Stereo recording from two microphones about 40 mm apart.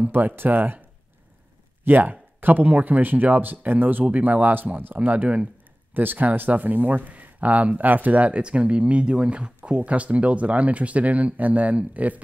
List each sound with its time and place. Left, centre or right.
0.1 s speech: right
1.9 s speech: right
5.9 s speech: right